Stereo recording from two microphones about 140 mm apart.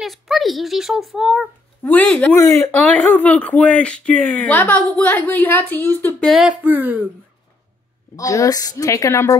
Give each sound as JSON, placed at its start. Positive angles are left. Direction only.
{"t": 0.0, "sound": "speech", "side_deg": 0}
{"t": 1.8, "sound": "speech", "side_deg": 15}
{"t": 6.6, "sound": "speech", "side_deg": -10}
{"t": 8.2, "sound": "a woman's voice", "side_deg": 25}